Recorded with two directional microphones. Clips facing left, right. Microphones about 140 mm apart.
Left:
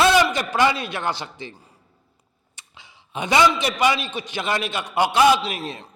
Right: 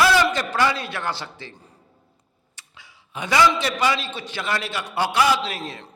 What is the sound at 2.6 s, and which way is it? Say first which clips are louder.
A man's voice: left 1 dB; 20° left (ahead or behind).